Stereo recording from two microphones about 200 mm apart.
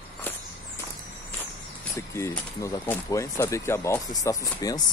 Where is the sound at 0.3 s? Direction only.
10° left (ahead or behind).